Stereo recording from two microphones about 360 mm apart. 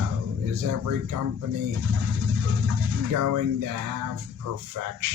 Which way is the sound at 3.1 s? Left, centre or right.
Right.